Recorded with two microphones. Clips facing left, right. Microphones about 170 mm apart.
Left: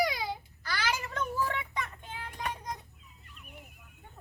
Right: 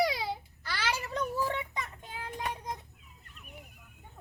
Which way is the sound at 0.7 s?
30° right (ahead or behind).